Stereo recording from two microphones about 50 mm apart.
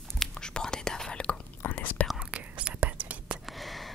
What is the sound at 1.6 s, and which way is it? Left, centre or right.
Whispering, left.